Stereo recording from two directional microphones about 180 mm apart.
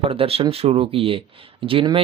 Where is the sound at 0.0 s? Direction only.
30° right (ahead or behind).